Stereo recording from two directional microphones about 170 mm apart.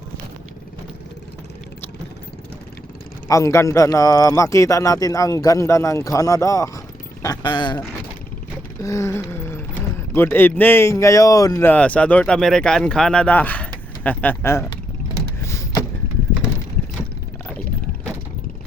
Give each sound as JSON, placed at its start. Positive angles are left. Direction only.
{"t": 3.2, "sound": "speech", "side_deg": 20}
{"t": 8.8, "sound": "speech", "side_deg": 20}
{"t": 15.4, "sound": "a sound", "side_deg": 15}